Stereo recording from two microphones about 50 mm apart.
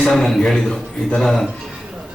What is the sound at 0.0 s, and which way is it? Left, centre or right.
A man's voice, centre.